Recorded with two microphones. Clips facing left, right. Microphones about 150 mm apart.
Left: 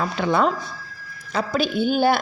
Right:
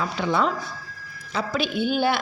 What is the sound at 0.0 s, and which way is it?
A woman's voice, 50° left (ahead or behind).